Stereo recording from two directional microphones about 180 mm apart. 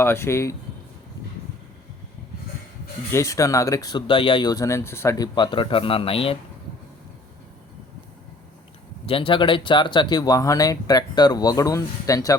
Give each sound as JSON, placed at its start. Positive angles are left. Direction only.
{"t": 0.0, "sound": "speech", "side_deg": 15}
{"t": 3.1, "sound": "speech", "side_deg": 15}
{"t": 9.0, "sound": "speech", "side_deg": 30}